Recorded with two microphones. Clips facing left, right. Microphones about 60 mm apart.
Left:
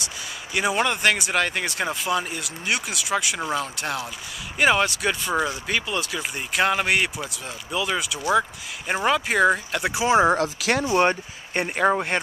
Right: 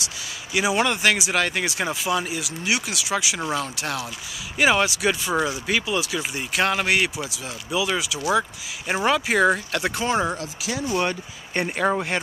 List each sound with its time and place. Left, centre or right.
0.0 s speech: centre
10.3 s speech: left
10.9 s speech: left
11.5 s speech: centre